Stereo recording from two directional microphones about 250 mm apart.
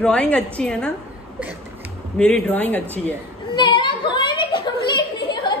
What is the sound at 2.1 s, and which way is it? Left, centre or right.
A woman's voice, centre.